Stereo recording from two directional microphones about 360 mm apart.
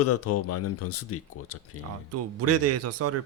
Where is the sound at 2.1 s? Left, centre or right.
Right.